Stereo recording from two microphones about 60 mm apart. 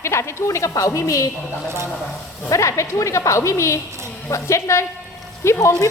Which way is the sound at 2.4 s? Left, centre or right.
Left.